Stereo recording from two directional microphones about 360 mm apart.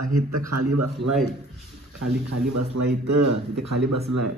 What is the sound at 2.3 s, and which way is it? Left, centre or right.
Speech, right.